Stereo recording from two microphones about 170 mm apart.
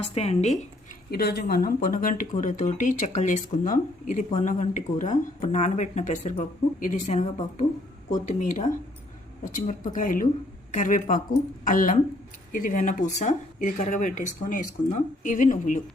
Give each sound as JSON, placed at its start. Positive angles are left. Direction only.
{"t": 0.0, "sound": "speech", "side_deg": 35}
{"t": 1.1, "sound": "speech", "side_deg": 70}